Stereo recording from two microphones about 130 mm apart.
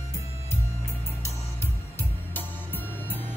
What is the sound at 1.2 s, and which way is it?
Music, 20° left (ahead or behind).